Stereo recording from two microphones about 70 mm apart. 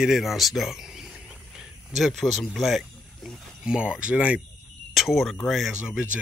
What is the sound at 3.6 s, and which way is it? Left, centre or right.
Speech, centre.